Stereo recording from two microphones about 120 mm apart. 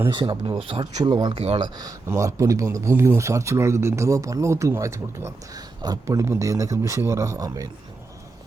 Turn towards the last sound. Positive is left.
turn(degrees=-30)  # may be behind; listen again after turning